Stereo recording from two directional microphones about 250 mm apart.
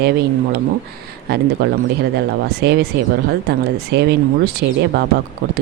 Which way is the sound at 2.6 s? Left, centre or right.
Right.